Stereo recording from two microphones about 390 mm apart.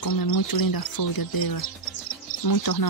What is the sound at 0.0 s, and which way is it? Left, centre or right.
Speech, left.